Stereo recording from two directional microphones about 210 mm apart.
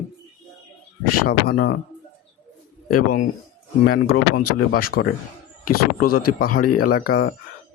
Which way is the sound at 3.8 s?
45° left (ahead or behind).